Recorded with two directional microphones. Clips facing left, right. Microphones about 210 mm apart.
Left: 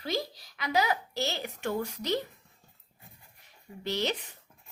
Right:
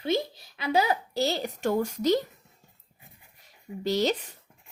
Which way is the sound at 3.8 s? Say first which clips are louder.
Right 6 dB; 40° right (ahead or behind).